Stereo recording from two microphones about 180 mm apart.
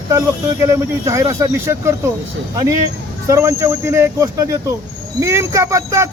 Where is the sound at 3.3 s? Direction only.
15° right (ahead or behind).